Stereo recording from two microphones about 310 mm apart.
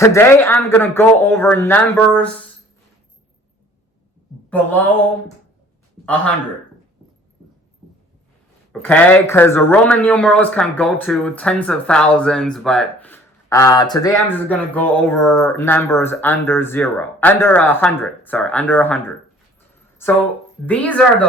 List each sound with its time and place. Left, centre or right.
0.0 s speech: centre
8.8 s a woman's voice: centre